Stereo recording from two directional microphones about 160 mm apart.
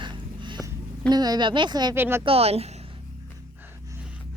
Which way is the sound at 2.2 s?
40° right (ahead or behind).